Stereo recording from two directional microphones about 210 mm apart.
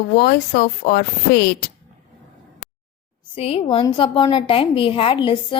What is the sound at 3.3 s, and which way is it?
A woman's voice, 30° left (ahead or behind).